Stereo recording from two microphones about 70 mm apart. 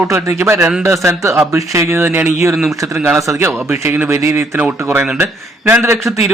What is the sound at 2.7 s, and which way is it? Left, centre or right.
Speech, right.